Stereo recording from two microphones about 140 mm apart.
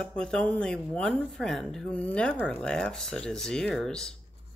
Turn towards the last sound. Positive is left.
turn(degrees=5)  # may be behind; listen again after turning